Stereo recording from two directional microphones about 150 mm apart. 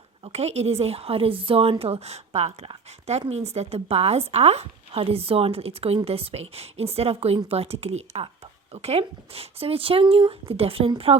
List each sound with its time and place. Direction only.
0.3 s a woman's voice: 45° right (ahead or behind)